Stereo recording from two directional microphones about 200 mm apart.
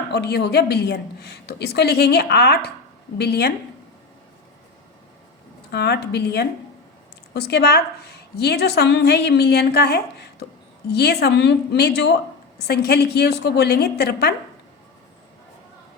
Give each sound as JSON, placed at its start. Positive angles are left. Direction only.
{"t": 0.1, "sound": "a woman's voice", "side_deg": 55}
{"t": 5.7, "sound": "a woman's voice", "side_deg": 55}